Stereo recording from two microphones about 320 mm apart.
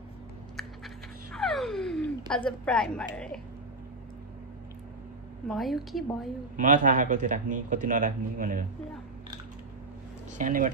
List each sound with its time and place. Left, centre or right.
0.6 s a sound: centre
5.5 s a woman's voice: centre
6.5 s a man's voice: right
10.3 s speech: right